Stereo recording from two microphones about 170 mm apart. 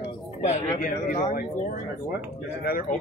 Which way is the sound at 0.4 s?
50° left (ahead or behind).